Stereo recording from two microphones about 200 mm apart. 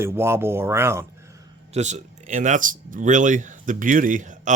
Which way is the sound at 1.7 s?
35° right (ahead or behind).